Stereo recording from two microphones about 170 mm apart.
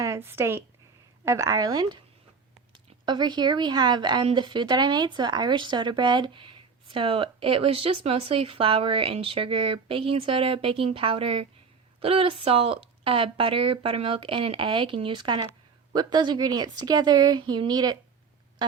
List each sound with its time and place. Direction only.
0.0 s a woman's voice: 15° right (ahead or behind)